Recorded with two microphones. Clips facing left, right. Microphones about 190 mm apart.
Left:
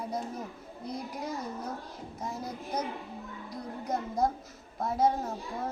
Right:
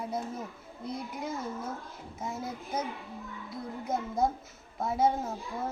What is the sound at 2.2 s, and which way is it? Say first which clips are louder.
Speech: right 1 dB; 5° right (ahead or behind).